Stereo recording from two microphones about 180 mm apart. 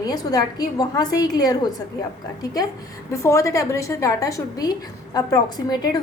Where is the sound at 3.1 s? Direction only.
15° left (ahead or behind).